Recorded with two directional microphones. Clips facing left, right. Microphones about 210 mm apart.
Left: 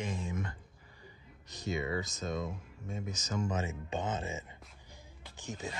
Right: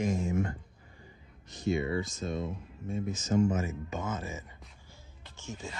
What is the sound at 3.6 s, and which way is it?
Speech, 30° left (ahead or behind).